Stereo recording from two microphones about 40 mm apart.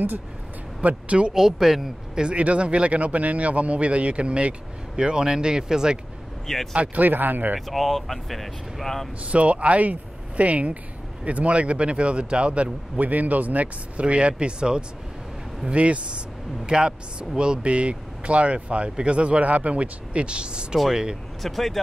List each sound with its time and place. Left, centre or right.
0.8 s speech: right
1.3 s speech: centre
2.3 s speech: right
6.4 s speech: centre
7.0 s speech: right
7.7 s speech: centre
9.2 s speech: right
13.0 s speech: right
16.6 s speech: right
21.4 s speech: centre